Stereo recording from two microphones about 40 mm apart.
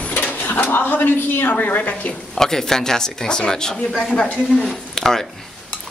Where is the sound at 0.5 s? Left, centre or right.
Left.